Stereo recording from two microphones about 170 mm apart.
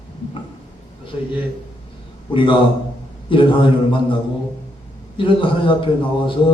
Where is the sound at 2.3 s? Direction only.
30° left (ahead or behind).